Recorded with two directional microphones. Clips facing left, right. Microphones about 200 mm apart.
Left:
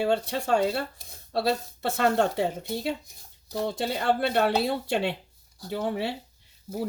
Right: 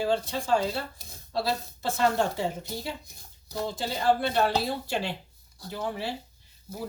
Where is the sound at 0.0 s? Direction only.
65° left (ahead or behind).